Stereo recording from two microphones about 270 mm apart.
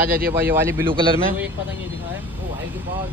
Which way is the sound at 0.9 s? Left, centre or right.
Centre.